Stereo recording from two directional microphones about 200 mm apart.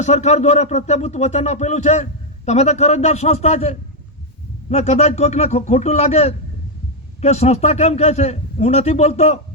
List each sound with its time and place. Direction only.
0.0 s speech: 35° left (ahead or behind)